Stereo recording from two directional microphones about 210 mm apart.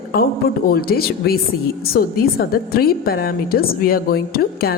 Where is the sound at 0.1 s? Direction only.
45° left (ahead or behind).